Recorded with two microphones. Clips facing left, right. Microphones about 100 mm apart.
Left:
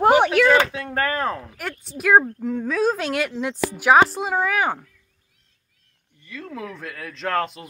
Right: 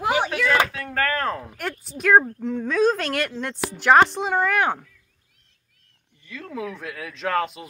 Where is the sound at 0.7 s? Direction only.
20° left (ahead or behind).